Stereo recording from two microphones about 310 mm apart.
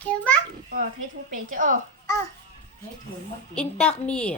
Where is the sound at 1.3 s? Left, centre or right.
Right.